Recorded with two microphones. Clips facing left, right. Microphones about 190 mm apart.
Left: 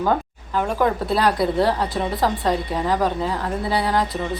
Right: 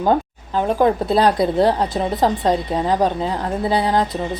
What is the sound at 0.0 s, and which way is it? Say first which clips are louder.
A woman's voice: right 4 dB; 30° right (ahead or behind).